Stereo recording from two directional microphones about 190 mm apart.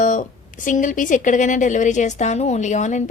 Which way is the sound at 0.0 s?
45° left (ahead or behind).